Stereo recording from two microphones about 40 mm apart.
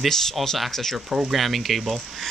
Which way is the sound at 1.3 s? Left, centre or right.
Centre.